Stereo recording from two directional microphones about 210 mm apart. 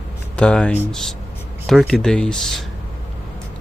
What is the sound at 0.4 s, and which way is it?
Speech, 5° left (ahead or behind).